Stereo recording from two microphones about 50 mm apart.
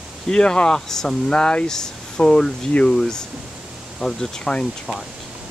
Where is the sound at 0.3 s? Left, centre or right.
Centre.